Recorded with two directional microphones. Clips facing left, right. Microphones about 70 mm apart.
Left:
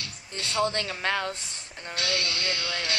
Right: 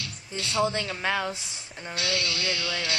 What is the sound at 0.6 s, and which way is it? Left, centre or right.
Speech, centre.